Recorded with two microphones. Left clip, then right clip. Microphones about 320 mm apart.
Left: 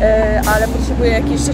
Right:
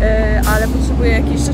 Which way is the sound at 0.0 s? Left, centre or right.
Centre.